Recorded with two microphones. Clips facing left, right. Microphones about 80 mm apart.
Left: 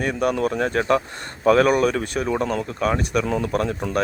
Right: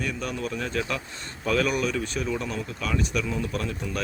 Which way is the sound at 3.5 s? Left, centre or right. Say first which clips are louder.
Left 8 dB; left.